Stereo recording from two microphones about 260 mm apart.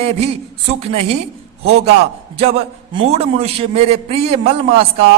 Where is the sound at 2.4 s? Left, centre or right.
Right.